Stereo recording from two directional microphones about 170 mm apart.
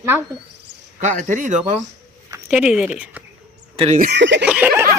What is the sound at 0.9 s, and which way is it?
Speech, 45° right (ahead or behind).